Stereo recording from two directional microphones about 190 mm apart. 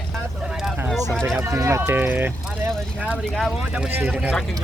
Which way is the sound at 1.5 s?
15° right (ahead or behind).